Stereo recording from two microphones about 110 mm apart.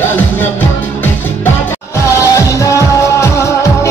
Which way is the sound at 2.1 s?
25° left (ahead or behind).